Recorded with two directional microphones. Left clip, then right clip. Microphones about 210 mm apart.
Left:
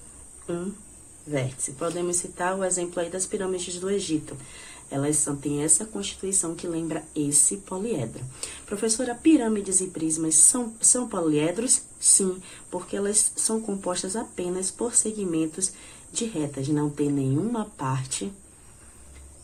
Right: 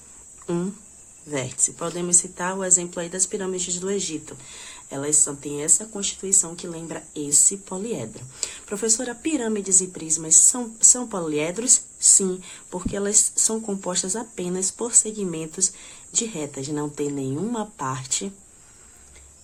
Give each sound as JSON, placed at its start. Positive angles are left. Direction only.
{"t": 1.3, "sound": "speech", "side_deg": -35}